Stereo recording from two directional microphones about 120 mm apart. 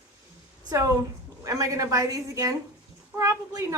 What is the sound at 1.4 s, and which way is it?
A woman's voice, 30° right (ahead or behind).